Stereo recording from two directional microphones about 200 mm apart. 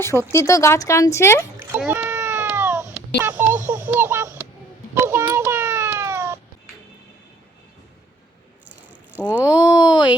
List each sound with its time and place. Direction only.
0.0 s speech: 15° left (ahead or behind)
1.5 s a sound: 10° right (ahead or behind)
4.9 s cat: 10° right (ahead or behind)
9.2 s a child's voice: 10° left (ahead or behind)